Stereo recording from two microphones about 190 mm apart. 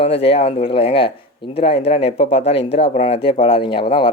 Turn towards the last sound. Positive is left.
turn(degrees=30)  # may be behind; listen again after turning